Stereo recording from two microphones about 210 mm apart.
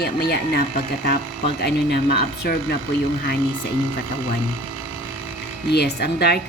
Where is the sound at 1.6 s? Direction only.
50° left (ahead or behind).